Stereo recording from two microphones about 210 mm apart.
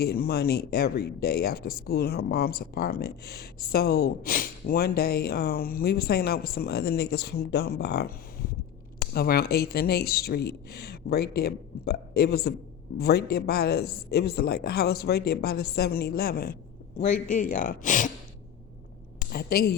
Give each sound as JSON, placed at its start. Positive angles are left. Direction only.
{"t": 0.0, "sound": "speech", "side_deg": 50}
{"t": 9.1, "sound": "speech", "side_deg": 45}
{"t": 19.3, "sound": "speech", "side_deg": 45}